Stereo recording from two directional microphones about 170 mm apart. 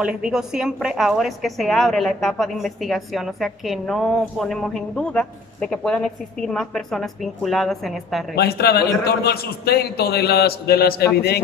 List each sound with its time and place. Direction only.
0.0 s a woman's voice: 5° right (ahead or behind)
8.4 s a man's voice: 70° left (ahead or behind)